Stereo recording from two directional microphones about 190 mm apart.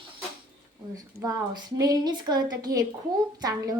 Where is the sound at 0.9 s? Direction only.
20° right (ahead or behind).